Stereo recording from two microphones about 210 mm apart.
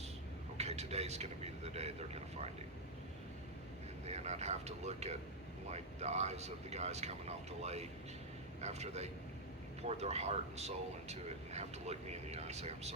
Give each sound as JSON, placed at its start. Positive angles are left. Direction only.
{"t": 0.5, "sound": "vehicle", "side_deg": -30}
{"t": 4.0, "sound": "a man's voice", "side_deg": -30}